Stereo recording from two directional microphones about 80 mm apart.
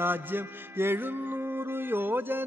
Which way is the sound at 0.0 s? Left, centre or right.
Right.